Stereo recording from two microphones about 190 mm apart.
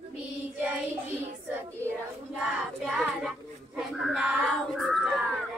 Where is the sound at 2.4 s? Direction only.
Centre (ahead or behind).